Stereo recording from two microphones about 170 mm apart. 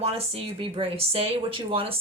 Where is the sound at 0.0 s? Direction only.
35° right (ahead or behind).